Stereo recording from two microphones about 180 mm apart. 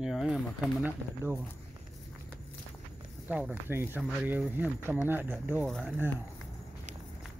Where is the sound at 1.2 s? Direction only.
15° right (ahead or behind).